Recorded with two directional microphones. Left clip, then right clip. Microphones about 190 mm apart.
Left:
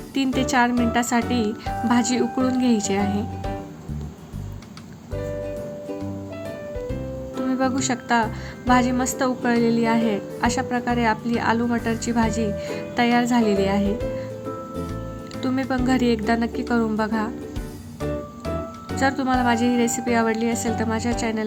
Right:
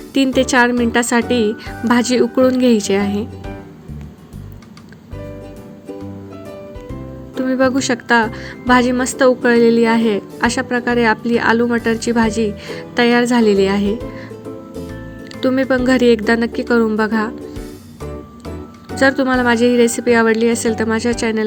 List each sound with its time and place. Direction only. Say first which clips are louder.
0.3 s speech: right 6 dB; 20° right (ahead or behind)
7.3 s speech: right 8 dB; 15° right (ahead or behind)
15.4 s speech: right 9 dB; 20° right (ahead or behind)
18.9 s speech: right 7 dB; 20° right (ahead or behind)